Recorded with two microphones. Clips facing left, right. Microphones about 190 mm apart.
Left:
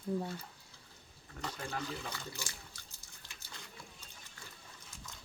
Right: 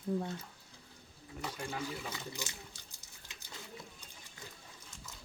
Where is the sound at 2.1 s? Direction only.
20° right (ahead or behind).